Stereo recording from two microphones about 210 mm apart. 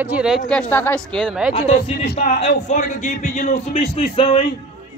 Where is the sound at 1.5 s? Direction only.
30° left (ahead or behind).